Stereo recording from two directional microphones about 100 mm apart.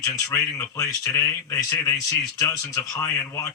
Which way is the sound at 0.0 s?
30° left (ahead or behind).